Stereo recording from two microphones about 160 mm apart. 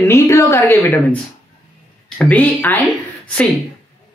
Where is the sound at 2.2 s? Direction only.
10° left (ahead or behind).